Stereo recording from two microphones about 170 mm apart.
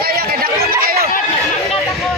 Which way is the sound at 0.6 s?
60° right (ahead or behind).